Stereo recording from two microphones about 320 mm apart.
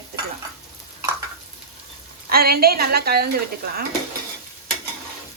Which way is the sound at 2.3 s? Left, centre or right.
Right.